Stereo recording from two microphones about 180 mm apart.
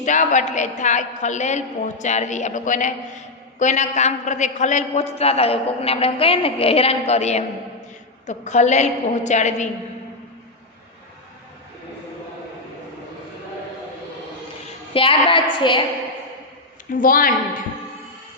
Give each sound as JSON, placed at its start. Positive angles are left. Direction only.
{"t": 0.0, "sound": "a man's voice", "side_deg": 45}
{"t": 14.9, "sound": "a woman's voice", "side_deg": 30}
{"t": 16.9, "sound": "a man's voice", "side_deg": 50}